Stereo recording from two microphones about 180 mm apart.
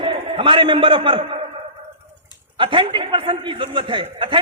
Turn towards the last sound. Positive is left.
turn(degrees=-25)  # may be behind; listen again after turning